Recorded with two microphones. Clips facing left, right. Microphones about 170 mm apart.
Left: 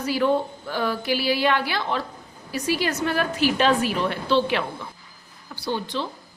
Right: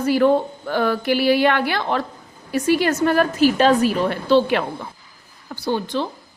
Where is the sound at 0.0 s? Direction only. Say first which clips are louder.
Right 5 dB; 50° right (ahead or behind).